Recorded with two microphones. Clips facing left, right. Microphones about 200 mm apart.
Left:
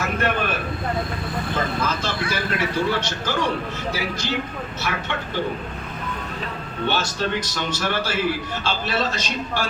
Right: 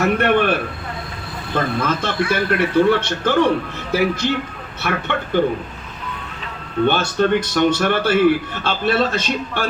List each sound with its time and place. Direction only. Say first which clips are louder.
0.0 s a sound: right 7 dB; 65° right (ahead or behind)
1.5 s a man's voice: right 7 dB; 60° right (ahead or behind)
6.8 s a man's voice: right 7 dB; 55° right (ahead or behind)